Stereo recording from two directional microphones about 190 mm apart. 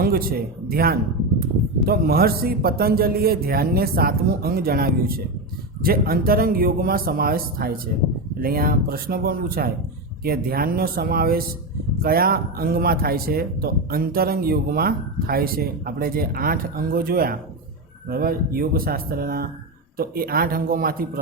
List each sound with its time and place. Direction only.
0.0 s speech: 50° right (ahead or behind)